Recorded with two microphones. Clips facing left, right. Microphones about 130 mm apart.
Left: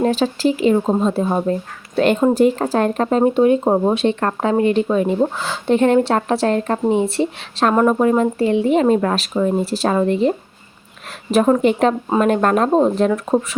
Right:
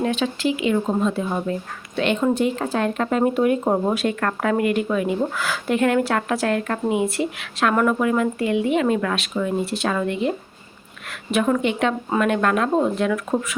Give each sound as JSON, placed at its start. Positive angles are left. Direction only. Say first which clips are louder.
{"t": 0.0, "sound": "speech", "louder": "left 5 dB", "side_deg": 35}